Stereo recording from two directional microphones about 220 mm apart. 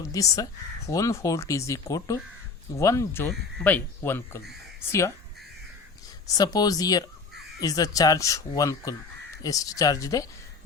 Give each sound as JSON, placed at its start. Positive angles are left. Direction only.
{"t": 0.0, "sound": "speech", "side_deg": 15}
{"t": 6.2, "sound": "speech", "side_deg": 15}